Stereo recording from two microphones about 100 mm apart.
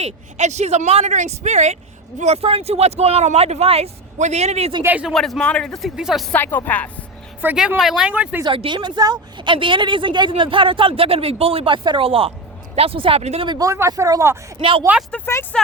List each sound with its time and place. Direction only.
0.6 s speech: 90° right
2.2 s speech: 85° right
4.8 s speech: 20° right (ahead or behind)
5.0 s a man's voice: centre (ahead or behind)
6.0 s a man's voice: 5° right (ahead or behind)
6.3 s speech: 20° left (ahead or behind)
7.4 s a woman's voice: 20° right (ahead or behind)
7.8 s speech: 5° right (ahead or behind)
8.4 s a woman's voice: 55° right (ahead or behind); by 13.5 s 90° right
13.6 s speech: 30° right (ahead or behind)
14.6 s a woman's voice: 60° right (ahead or behind)
15.1 s speech: 15° left (ahead or behind)